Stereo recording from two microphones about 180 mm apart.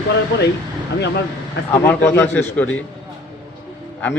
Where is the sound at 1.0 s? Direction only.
75° left (ahead or behind).